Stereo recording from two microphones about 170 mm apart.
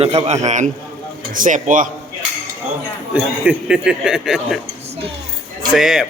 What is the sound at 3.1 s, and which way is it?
Speech, 5° right (ahead or behind).